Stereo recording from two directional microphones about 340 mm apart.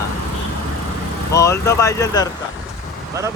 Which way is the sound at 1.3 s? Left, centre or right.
Centre.